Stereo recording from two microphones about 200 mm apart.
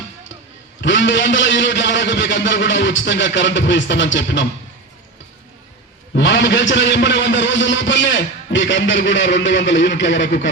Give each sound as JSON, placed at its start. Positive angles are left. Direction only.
{"t": 0.8, "sound": "a man's voice", "side_deg": 65}
{"t": 6.1, "sound": "a man's voice", "side_deg": 60}